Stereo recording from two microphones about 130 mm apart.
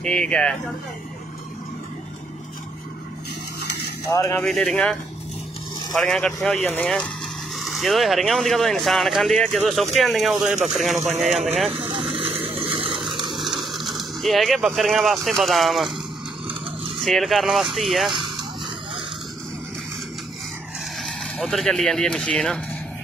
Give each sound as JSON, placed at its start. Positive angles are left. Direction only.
{"t": 0.0, "sound": "speech", "side_deg": 5}
{"t": 4.1, "sound": "speech", "side_deg": 25}
{"t": 4.4, "sound": "speech", "side_deg": 5}
{"t": 5.9, "sound": "speech", "side_deg": 5}
{"t": 11.9, "sound": "vehicle", "side_deg": -45}
{"t": 13.1, "sound": "a sound", "side_deg": -35}
{"t": 13.4, "sound": "a sound", "side_deg": 0}
{"t": 13.9, "sound": "speech", "side_deg": 0}
{"t": 16.4, "sound": "a sound", "side_deg": -45}
{"t": 17.0, "sound": "speech", "side_deg": 0}
{"t": 21.0, "sound": "speech", "side_deg": 0}